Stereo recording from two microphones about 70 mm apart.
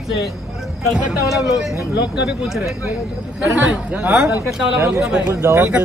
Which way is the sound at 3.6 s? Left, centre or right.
Centre.